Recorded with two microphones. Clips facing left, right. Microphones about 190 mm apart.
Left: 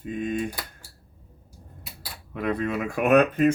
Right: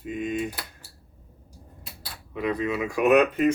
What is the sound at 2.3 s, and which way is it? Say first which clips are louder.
Speech: even; 55° left (ahead or behind).